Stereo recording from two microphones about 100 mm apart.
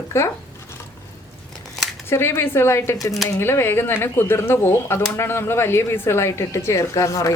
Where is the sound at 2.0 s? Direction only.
25° left (ahead or behind).